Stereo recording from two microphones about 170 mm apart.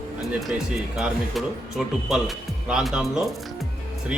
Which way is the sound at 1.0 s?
Centre (ahead or behind).